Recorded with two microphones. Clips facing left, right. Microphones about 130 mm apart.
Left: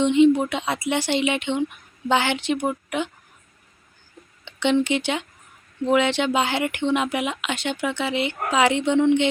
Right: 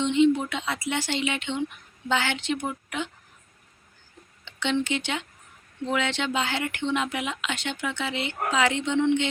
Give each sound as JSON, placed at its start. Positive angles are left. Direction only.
{"t": 0.0, "sound": "speech", "side_deg": 15}
{"t": 4.6, "sound": "speech", "side_deg": 15}